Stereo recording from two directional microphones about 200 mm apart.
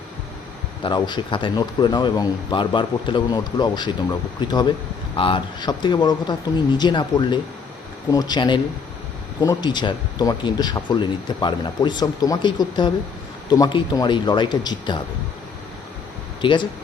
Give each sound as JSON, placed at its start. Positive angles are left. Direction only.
{"t": 0.9, "sound": "speech", "side_deg": 20}
{"t": 16.4, "sound": "speech", "side_deg": 25}